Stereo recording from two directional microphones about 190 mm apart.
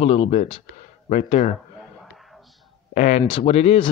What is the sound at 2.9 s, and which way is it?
Speech, 40° left (ahead or behind).